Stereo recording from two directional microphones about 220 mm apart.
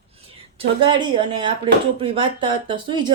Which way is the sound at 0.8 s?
20° right (ahead or behind).